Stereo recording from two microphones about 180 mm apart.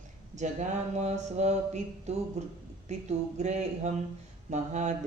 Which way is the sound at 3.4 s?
40° right (ahead or behind).